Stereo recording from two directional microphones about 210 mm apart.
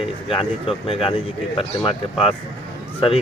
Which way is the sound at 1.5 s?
25° left (ahead or behind).